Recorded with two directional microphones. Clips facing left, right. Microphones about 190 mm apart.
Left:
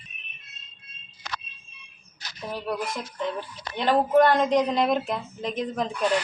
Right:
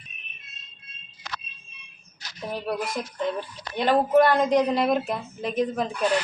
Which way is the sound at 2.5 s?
15° right (ahead or behind).